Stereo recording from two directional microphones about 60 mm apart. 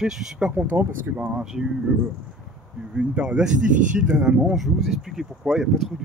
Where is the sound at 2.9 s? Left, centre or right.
Centre.